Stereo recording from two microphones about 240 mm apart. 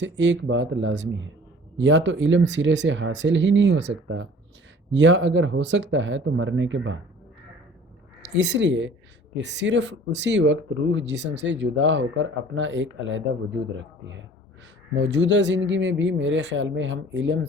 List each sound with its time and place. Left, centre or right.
0.0 s speech: right
8.4 s speech: right
14.9 s speech: right